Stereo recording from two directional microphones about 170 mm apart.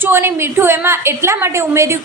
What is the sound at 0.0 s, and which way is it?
A woman's voice, 15° right (ahead or behind).